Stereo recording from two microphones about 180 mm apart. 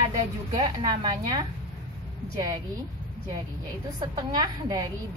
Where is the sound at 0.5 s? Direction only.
25° right (ahead or behind).